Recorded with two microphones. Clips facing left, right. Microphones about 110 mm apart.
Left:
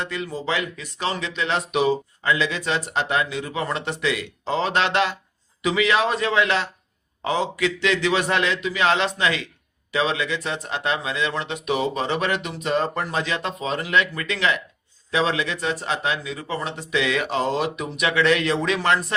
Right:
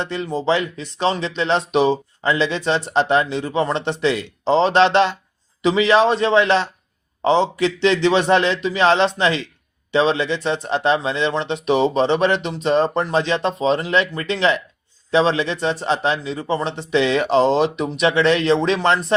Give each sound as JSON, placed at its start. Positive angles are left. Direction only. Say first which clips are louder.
{"t": 0.0, "sound": "speech", "louder": "right 6 dB", "side_deg": -30}